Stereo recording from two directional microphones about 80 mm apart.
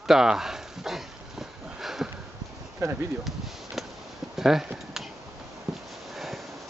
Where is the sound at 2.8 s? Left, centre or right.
Right.